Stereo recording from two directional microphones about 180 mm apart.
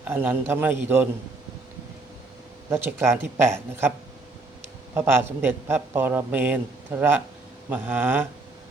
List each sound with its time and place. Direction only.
0.0 s a man's voice: 10° right (ahead or behind)
2.6 s a man's voice: 15° right (ahead or behind)
4.9 s a man's voice: 10° right (ahead or behind)